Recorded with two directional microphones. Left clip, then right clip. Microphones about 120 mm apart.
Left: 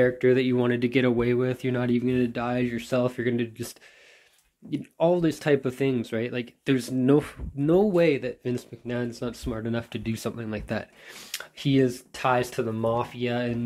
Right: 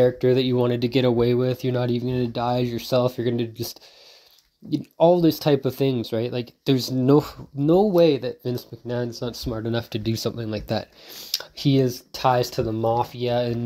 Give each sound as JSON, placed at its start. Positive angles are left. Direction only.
{"t": 0.0, "sound": "speech", "side_deg": -30}
{"t": 9.7, "sound": "speech", "side_deg": -50}
{"t": 10.1, "sound": "speech", "side_deg": -30}